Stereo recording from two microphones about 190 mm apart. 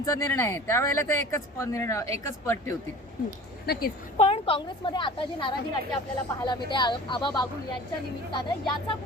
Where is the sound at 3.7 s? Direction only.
50° left (ahead or behind).